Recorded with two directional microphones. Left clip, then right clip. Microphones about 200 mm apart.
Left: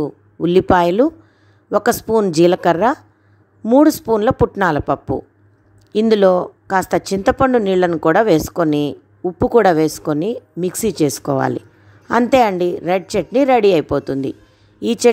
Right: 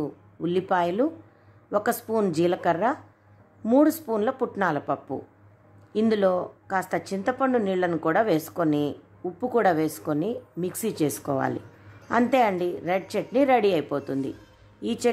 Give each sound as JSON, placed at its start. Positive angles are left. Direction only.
{"t": 0.0, "sound": "speech", "side_deg": 40}